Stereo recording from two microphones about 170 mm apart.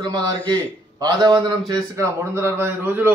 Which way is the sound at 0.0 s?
25° right (ahead or behind).